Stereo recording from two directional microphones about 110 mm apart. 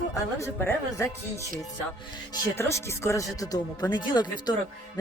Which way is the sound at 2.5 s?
25° left (ahead or behind).